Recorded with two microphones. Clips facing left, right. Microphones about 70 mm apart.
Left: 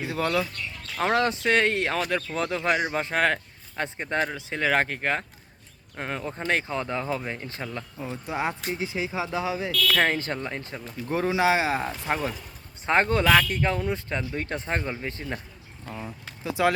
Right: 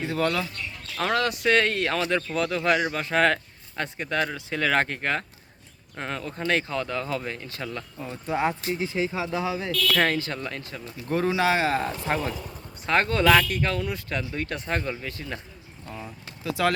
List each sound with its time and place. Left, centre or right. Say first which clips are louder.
0.0 s speech: even; centre
1.0 s speech: left 1 dB; left
1.5 s a man's voice: even; centre
3.8 s speech: even; left
7.6 s speech: even; centre
9.3 s a sound: even; centre
10.2 s speech: even; left
10.4 s speech: left 1 dB; left
12.8 s speech: even; left
15.9 s speech: left 2 dB; centre